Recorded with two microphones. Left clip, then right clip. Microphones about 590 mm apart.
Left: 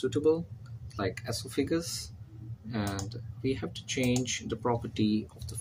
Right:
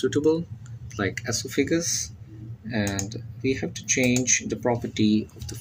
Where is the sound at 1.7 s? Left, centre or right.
Left.